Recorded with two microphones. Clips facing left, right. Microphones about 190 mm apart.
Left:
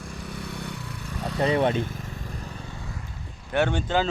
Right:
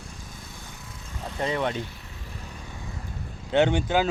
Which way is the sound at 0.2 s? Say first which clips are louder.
Left 9 dB; 70° left (ahead or behind).